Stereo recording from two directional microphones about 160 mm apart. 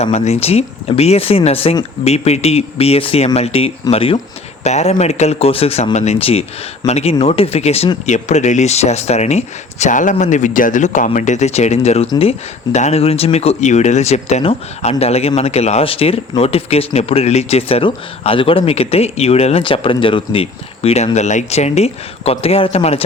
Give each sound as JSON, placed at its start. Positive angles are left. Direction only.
{"t": 0.0, "sound": "speech", "side_deg": 40}